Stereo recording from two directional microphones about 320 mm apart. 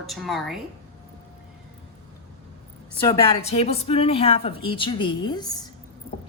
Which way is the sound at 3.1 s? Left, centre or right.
Centre.